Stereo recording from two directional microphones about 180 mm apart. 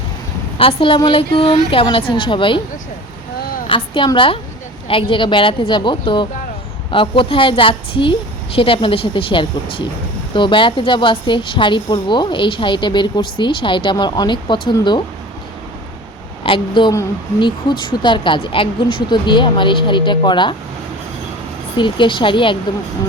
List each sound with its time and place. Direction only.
0.6 s a woman's voice: 30° left (ahead or behind)
3.7 s a woman's voice: 30° left (ahead or behind)
16.4 s a woman's voice: 25° left (ahead or behind)
21.8 s a woman's voice: 25° left (ahead or behind)